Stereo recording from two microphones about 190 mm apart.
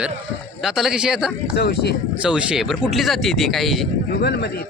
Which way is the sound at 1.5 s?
55° left (ahead or behind).